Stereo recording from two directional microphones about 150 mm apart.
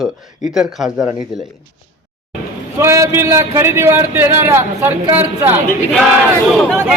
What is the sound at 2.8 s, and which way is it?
A man's voice, 20° right (ahead or behind).